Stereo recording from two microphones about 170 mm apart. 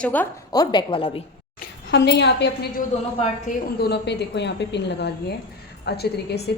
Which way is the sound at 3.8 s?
80° left.